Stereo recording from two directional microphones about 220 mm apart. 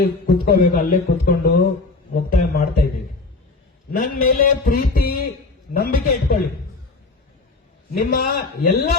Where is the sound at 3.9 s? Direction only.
40° left (ahead or behind).